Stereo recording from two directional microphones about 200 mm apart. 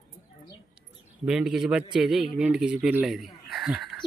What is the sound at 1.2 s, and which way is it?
A man's voice, 5° right (ahead or behind).